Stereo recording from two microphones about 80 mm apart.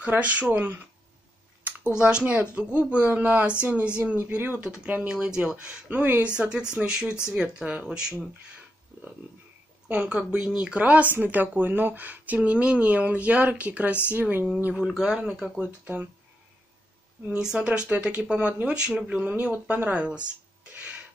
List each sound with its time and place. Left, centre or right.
0.0 s speech: centre
2.0 s speech: centre
9.8 s speech: centre
15.6 s speech: right
17.3 s speech: centre
20.7 s a sound: centre